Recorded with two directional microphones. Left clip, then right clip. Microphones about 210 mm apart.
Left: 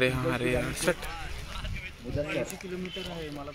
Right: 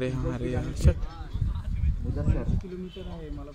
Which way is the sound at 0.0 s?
Centre (ahead or behind).